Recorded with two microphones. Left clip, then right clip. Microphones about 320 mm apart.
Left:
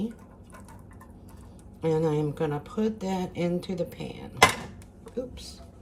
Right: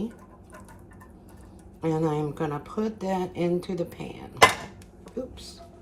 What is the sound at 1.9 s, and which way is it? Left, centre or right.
Speech, centre.